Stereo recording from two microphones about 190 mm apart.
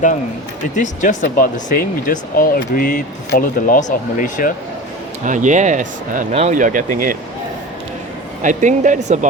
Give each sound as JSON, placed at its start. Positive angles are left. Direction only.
{"t": 0.8, "sound": "speech", "side_deg": 45}
{"t": 5.2, "sound": "speech", "side_deg": -40}
{"t": 8.4, "sound": "speech", "side_deg": -40}